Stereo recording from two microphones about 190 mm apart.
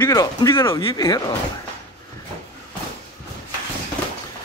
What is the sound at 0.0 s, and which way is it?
Speech, 15° left (ahead or behind).